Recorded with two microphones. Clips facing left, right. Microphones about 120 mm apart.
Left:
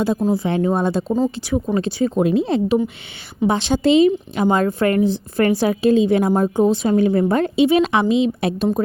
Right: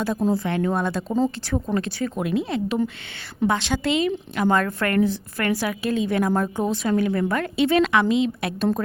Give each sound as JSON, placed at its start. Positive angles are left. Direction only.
{"t": 0.2, "sound": "speech", "side_deg": 5}
{"t": 0.4, "sound": "a woman's voice", "side_deg": 20}
{"t": 1.1, "sound": "speech", "side_deg": 5}
{"t": 1.7, "sound": "a woman's voice", "side_deg": 20}